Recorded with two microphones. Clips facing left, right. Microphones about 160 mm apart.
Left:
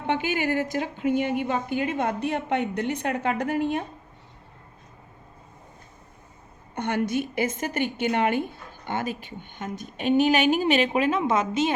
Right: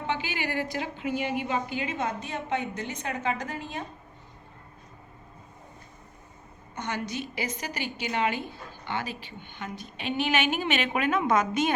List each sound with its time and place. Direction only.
0.1 s a woman's voice: 50° left (ahead or behind)
6.7 s a woman's voice: 55° left (ahead or behind); by 11.7 s 25° left (ahead or behind)